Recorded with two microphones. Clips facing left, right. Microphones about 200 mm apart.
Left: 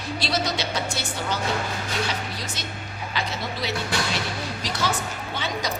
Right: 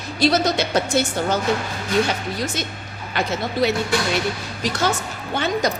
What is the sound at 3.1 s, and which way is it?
Speech, 50° right (ahead or behind).